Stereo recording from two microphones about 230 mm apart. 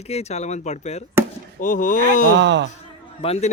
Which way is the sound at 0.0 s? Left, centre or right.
Left.